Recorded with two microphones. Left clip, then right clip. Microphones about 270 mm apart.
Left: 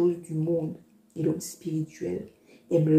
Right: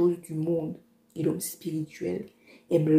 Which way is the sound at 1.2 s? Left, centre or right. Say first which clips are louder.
Even; right.